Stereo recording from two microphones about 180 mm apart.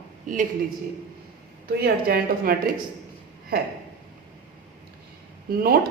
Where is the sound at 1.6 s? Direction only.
60° right (ahead or behind).